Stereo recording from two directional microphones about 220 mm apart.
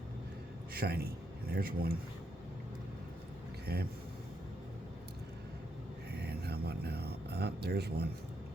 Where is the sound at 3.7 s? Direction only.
45° right (ahead or behind).